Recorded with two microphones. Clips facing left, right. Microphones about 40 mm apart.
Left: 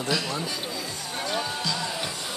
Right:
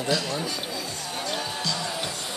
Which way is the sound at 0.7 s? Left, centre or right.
Centre.